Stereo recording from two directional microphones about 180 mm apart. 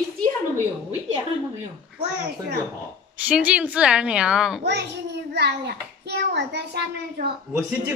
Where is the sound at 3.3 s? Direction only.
5° right (ahead or behind).